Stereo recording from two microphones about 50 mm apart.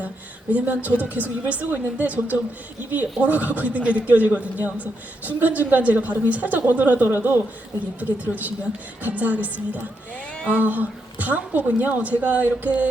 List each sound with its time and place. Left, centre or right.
0.5 s a woman's voice: right